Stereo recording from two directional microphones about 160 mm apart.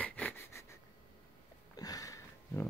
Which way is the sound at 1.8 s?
20° left (ahead or behind).